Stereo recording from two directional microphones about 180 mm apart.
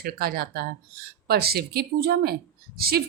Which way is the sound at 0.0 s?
55° right (ahead or behind).